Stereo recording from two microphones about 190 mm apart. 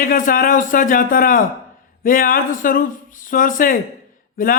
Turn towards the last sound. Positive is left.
turn(degrees=45)  # may be behind; listen again after turning